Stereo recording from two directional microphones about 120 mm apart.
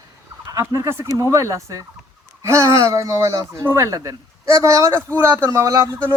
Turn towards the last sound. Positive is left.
turn(degrees=-25)  # may be behind; listen again after turning